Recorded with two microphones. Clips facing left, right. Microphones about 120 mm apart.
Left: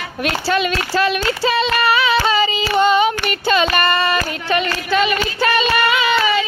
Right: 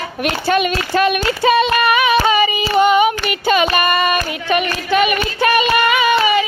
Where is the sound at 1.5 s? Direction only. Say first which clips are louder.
Right 1 dB; 20° right (ahead or behind).